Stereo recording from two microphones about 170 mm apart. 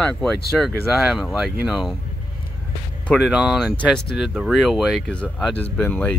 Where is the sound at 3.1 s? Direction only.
5° right (ahead or behind).